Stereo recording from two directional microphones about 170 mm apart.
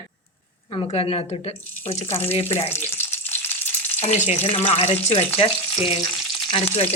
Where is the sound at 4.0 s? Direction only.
40° left (ahead or behind).